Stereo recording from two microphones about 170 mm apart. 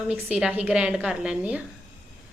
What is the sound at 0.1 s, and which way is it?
A woman's voice, 5° right (ahead or behind).